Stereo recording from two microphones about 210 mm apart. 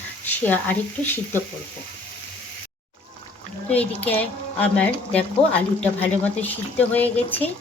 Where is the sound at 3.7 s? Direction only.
5° left (ahead or behind).